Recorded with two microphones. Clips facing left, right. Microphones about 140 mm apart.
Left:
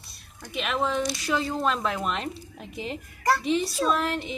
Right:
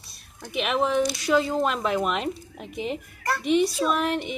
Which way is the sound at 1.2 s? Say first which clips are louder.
Right 4 dB; 10° right (ahead or behind).